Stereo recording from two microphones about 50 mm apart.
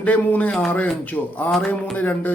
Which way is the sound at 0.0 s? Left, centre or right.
Left.